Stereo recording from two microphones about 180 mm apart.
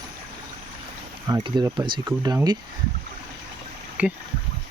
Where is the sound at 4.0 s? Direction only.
5° right (ahead or behind).